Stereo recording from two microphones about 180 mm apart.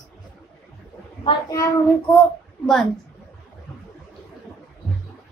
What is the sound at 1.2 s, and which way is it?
Speech, 20° left (ahead or behind).